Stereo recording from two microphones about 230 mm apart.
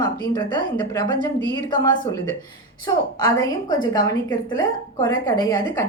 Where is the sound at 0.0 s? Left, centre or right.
Centre.